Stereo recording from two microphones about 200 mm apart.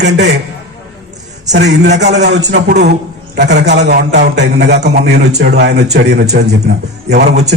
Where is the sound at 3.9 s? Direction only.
55° right (ahead or behind).